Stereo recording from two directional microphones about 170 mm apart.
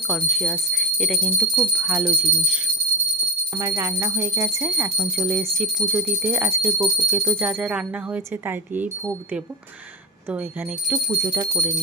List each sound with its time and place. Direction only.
0.1 s speech: 5° left (ahead or behind)
1.5 s speech: 10° right (ahead or behind)
10.2 s speech: 10° right (ahead or behind)